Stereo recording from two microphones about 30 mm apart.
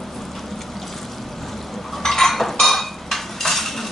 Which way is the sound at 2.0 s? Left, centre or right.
Centre.